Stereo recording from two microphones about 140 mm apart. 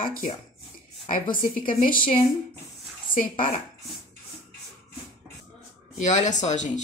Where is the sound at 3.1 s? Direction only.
70° left (ahead or behind).